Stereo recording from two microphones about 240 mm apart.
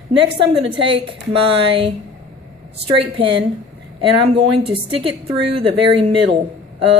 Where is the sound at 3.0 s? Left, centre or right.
Right.